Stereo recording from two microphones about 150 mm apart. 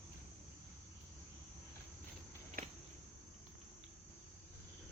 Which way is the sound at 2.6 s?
80° right.